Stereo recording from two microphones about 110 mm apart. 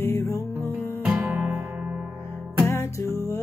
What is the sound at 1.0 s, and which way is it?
Music, 20° right (ahead or behind).